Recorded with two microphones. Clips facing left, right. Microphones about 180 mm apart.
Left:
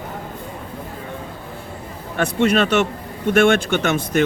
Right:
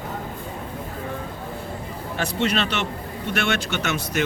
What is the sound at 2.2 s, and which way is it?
Speech, 50° left (ahead or behind).